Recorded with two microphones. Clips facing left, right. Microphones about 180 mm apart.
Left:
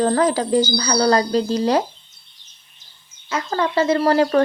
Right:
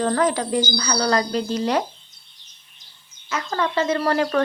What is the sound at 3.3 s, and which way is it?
Speech, 30° left (ahead or behind).